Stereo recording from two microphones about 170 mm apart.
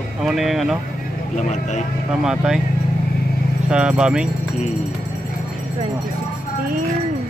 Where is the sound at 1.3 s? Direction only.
45° left (ahead or behind).